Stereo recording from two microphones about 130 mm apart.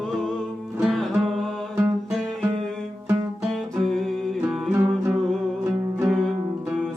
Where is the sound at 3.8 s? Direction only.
5° left (ahead or behind).